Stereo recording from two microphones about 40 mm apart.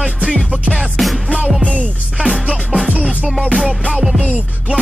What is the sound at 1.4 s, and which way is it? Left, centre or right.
Music, centre.